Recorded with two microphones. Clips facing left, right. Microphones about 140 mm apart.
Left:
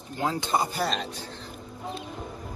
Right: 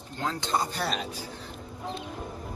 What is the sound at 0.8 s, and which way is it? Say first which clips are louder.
Speech: left 2 dB; 5° right (ahead or behind).